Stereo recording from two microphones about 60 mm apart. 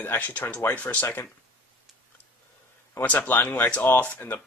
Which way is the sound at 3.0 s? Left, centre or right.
Left.